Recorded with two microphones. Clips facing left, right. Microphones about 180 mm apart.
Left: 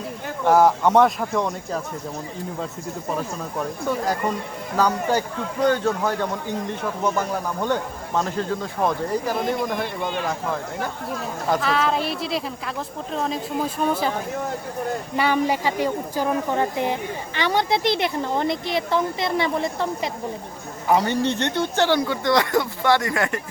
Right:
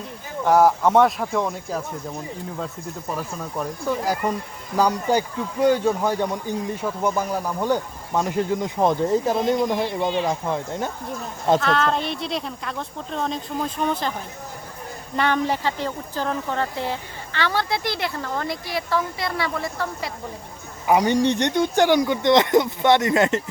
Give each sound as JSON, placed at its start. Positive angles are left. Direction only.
{"t": 0.4, "sound": "speech", "side_deg": 0}
{"t": 3.8, "sound": "speech", "side_deg": 0}
{"t": 11.6, "sound": "speech", "side_deg": 5}
{"t": 15.1, "sound": "speech", "side_deg": 10}
{"t": 20.8, "sound": "speech", "side_deg": -15}